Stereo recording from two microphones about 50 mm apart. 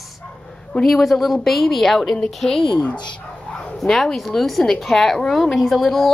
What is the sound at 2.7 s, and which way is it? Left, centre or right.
Speech, left.